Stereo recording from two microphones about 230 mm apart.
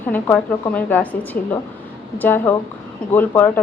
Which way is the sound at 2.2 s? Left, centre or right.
Centre.